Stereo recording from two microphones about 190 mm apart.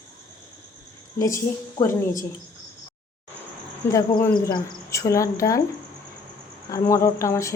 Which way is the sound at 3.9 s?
15° left (ahead or behind).